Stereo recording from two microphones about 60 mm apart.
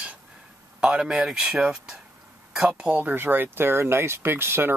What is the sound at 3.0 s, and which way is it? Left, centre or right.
Speech, right.